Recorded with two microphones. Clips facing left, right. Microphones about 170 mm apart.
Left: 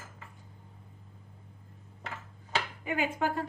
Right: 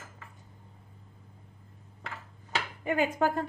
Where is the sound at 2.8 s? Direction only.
45° right (ahead or behind).